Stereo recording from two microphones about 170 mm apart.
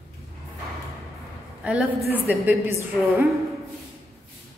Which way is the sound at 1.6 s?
5° right (ahead or behind).